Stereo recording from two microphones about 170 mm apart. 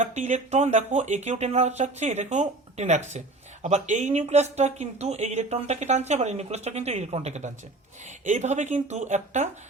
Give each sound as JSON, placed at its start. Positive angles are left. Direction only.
{"t": 0.0, "sound": "speech", "side_deg": -45}